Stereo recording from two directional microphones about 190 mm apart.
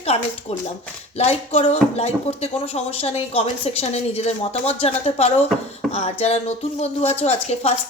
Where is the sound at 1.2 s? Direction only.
35° left (ahead or behind).